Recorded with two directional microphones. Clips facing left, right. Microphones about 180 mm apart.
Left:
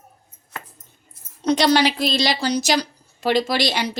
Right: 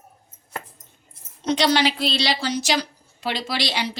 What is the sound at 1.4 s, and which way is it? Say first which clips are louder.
A woman's voice: left 3 dB; 40° left (ahead or behind).